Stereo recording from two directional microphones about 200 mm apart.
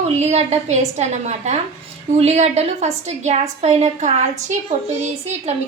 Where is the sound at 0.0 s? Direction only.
35° right (ahead or behind).